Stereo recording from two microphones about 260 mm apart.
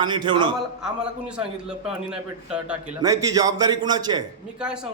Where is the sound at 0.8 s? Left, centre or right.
Centre.